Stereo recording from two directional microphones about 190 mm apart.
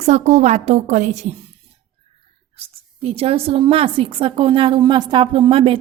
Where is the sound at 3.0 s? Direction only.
30° right (ahead or behind).